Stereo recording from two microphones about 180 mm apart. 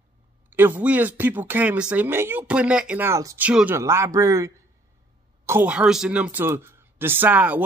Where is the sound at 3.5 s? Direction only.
5° right (ahead or behind).